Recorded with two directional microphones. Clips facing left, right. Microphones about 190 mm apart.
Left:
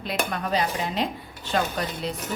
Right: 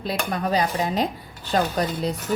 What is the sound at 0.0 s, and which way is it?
Dishes, 35° right (ahead or behind).